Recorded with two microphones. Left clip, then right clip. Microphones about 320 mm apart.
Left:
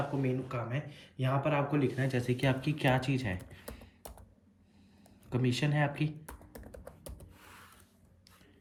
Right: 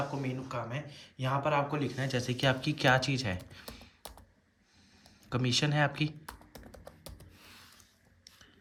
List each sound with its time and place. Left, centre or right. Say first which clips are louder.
0.2 s speech: left 2 dB; centre
5.3 s speech: right 3 dB; centre
6.5 s music: left 1 dB; centre